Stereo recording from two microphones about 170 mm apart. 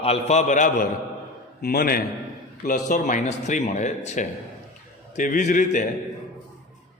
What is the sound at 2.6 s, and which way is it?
A man's voice, 50° left (ahead or behind).